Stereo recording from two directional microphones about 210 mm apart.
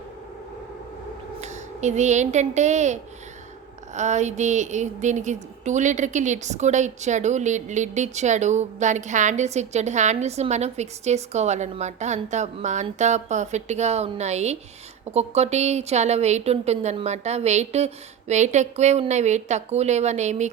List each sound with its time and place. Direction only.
1.4 s a woman's voice: 35° right (ahead or behind)